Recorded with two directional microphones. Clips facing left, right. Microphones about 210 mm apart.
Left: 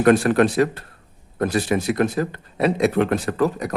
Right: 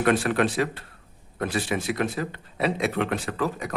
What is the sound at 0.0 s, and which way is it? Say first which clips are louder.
Speech: left 7 dB; 40° left (ahead or behind).